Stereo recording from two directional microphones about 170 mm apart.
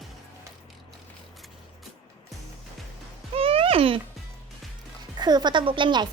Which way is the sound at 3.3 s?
35° right (ahead or behind).